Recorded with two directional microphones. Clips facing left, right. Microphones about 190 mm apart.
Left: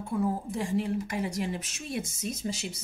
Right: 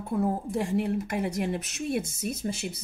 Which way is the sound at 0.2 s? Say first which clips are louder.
Right 3 dB; 55° right (ahead or behind).